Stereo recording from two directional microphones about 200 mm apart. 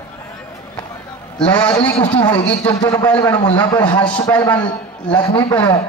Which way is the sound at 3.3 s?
25° left (ahead or behind).